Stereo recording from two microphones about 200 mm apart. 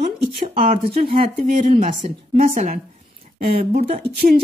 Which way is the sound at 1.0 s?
40° right (ahead or behind).